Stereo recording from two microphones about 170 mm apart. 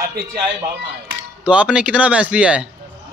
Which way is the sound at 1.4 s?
5° right (ahead or behind).